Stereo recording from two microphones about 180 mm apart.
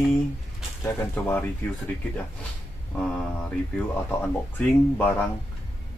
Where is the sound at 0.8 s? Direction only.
10° left (ahead or behind).